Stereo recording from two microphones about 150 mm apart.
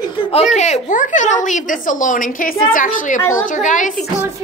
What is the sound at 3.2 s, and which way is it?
Speech, 20° left (ahead or behind).